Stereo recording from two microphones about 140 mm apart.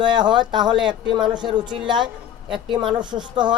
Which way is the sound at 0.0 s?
35° right (ahead or behind).